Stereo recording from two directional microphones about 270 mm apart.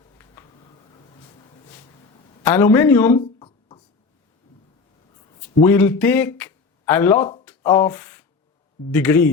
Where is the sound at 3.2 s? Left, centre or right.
Centre.